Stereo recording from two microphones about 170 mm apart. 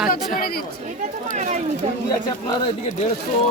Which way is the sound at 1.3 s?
45° right (ahead or behind).